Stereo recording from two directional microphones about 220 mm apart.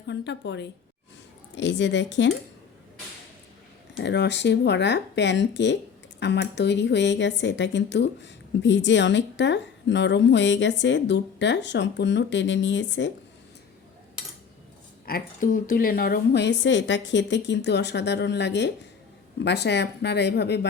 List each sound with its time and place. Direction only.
0.1 s a woman's voice: 50° left (ahead or behind)
3.9 s a woman's voice: 50° left (ahead or behind)
15.0 s a woman's voice: 40° left (ahead or behind)